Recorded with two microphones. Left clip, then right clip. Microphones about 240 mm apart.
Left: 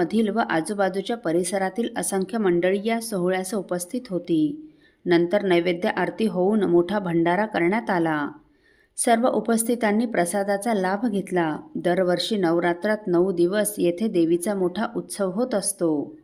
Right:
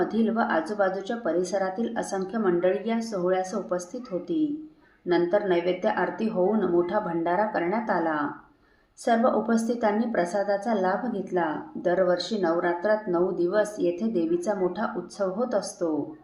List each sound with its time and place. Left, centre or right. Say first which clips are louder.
0.0 s a woman's voice: left 2 dB; left